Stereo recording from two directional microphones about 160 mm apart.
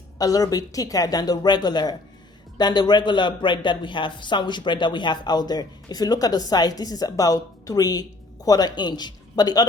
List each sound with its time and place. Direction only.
0.2 s a man's voice: 20° left (ahead or behind)